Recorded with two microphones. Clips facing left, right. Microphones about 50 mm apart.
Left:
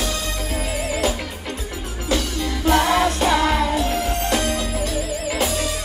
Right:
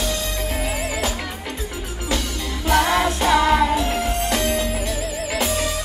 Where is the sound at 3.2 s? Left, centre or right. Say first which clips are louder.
Right 2 dB; centre.